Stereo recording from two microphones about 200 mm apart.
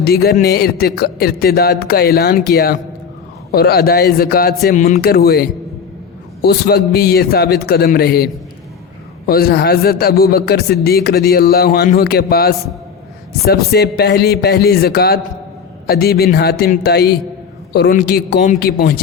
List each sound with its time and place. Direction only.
0.0 s a man's voice: 50° left (ahead or behind)
4.9 s a man's voice: 50° left (ahead or behind)